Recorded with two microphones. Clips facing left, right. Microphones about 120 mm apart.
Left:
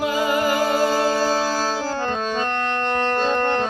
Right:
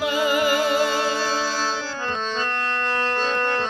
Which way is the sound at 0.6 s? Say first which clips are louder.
Left 2 dB; 40° left (ahead or behind).